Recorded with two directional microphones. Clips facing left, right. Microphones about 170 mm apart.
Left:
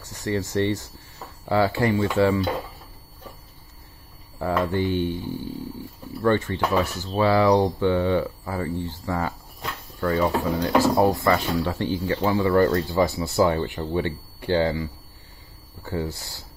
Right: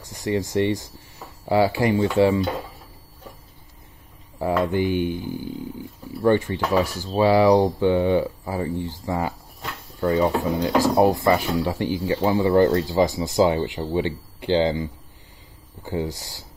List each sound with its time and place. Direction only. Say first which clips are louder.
0.0 s speech: right 2 dB; 15° right (ahead or behind)
4.4 s speech: right 2 dB; 15° right (ahead or behind)